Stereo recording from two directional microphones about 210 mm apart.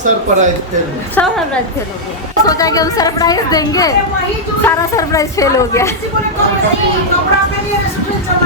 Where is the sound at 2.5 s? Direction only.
15° left (ahead or behind).